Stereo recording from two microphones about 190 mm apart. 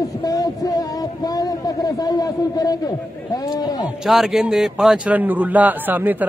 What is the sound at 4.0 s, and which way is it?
A man's voice, centre (ahead or behind).